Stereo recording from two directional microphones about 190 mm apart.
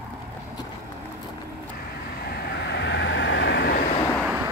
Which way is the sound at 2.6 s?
65° left (ahead or behind).